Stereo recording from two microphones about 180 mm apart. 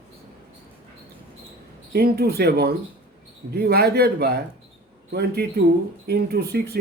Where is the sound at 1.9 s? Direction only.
60° right (ahead or behind).